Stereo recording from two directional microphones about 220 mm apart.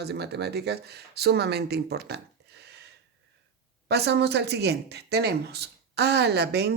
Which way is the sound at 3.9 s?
50° right (ahead or behind).